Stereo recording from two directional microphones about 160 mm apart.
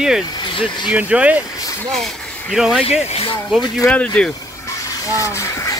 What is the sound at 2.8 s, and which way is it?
Speech, 40° left (ahead or behind).